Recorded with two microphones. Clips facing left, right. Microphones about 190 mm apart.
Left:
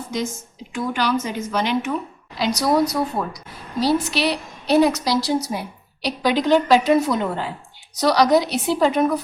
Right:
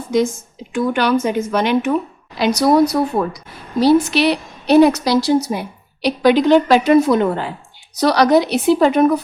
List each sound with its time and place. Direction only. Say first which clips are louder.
0.7 s a woman's voice: right 6 dB; 55° right (ahead or behind)